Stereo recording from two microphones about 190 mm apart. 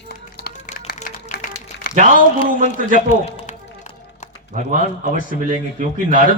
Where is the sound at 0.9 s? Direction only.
40° left (ahead or behind).